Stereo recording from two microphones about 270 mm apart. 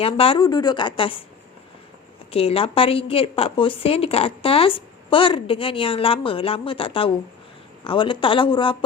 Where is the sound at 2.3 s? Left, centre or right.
Left.